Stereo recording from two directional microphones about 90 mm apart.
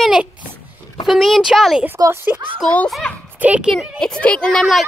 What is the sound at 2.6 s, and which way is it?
Speech, 5° left (ahead or behind).